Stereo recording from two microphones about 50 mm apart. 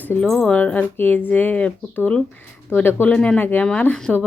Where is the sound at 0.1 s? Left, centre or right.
Left.